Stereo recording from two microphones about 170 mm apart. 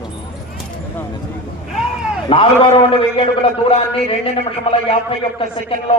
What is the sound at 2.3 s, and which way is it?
A man's voice, 35° left (ahead or behind).